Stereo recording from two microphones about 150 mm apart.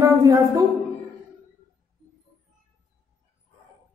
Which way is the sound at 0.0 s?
20° right (ahead or behind).